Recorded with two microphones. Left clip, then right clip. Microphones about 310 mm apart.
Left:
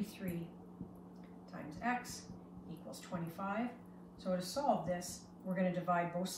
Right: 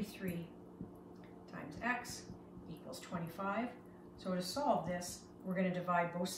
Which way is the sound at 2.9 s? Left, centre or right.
Centre.